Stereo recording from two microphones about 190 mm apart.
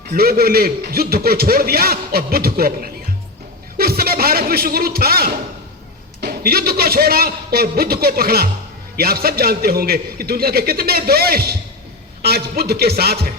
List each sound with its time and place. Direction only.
0.1 s a man's voice: 50° right (ahead or behind)
12.2 s music: 55° right (ahead or behind)